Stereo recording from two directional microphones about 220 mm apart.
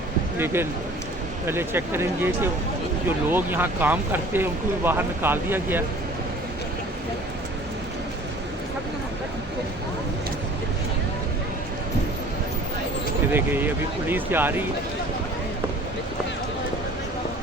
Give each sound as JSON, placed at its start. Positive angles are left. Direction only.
{"t": 0.3, "sound": "speech", "side_deg": -10}
{"t": 13.3, "sound": "speech", "side_deg": -10}